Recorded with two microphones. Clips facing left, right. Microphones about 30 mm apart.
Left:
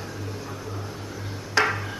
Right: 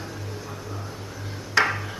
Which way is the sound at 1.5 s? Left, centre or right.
Centre.